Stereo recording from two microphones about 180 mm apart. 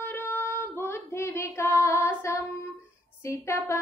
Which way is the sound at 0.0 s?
10° left (ahead or behind).